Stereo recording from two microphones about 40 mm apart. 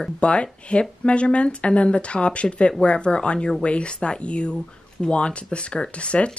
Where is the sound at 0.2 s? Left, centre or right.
Left.